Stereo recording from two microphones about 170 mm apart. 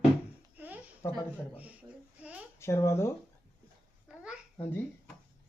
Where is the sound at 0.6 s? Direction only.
10° right (ahead or behind).